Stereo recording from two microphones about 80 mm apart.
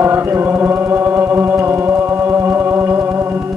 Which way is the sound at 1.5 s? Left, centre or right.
Right.